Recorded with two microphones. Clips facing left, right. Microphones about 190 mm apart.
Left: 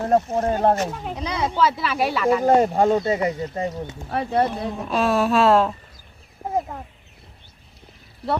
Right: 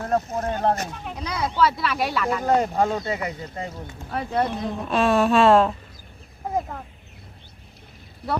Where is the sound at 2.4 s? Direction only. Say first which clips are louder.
Left 3 dB; 30° left (ahead or behind).